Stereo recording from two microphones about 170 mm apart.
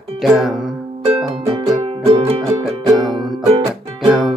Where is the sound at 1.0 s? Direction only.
30° right (ahead or behind).